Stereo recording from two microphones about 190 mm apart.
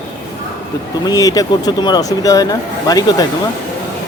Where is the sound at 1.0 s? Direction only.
20° left (ahead or behind).